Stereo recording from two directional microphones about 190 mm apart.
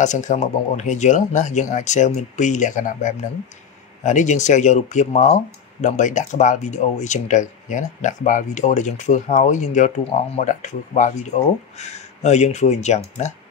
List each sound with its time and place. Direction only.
0.0 s speech: 40° left (ahead or behind)